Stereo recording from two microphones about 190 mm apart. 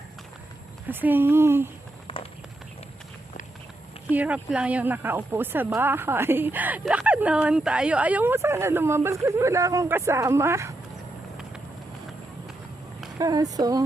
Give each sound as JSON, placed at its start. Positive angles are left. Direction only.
{"t": 0.9, "sound": "speech", "side_deg": -10}
{"t": 2.1, "sound": "run", "side_deg": 30}
{"t": 4.1, "sound": "speech", "side_deg": -5}
{"t": 13.1, "sound": "speech", "side_deg": -20}